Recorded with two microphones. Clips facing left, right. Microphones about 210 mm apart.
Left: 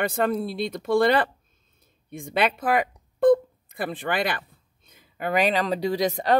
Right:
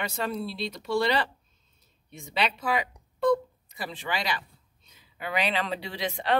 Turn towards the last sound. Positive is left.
turn(degrees=40)  # may be behind; listen again after turning